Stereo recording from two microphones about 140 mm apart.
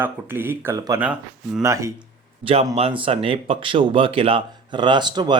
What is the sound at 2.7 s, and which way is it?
Speech, 40° right (ahead or behind).